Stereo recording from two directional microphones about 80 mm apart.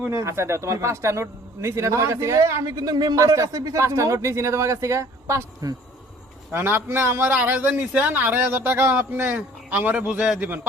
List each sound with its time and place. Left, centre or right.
0.1 s a man's voice: right
2.9 s speech: right
3.2 s a man's voice: right
6.5 s speech: right